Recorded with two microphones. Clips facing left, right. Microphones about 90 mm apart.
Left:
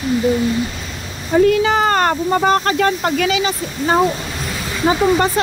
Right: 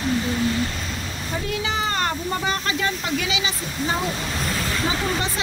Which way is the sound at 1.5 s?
50° left (ahead or behind).